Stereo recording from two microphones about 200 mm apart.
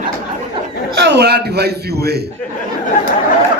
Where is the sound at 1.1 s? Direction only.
55° right (ahead or behind).